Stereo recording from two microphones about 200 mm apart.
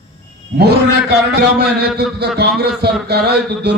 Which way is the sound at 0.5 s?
55° right (ahead or behind).